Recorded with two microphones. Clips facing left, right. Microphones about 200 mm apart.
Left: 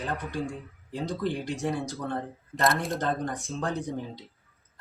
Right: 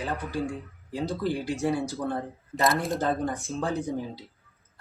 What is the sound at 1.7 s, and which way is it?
Speech, 15° left (ahead or behind).